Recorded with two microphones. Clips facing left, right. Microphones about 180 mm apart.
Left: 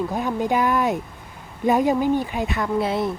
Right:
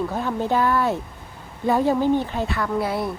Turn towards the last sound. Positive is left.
turn(degrees=20)  # may be behind; listen again after turning